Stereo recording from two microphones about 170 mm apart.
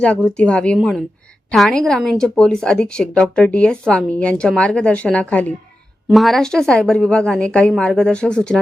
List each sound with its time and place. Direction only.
0.0 s a woman's voice: 5° left (ahead or behind)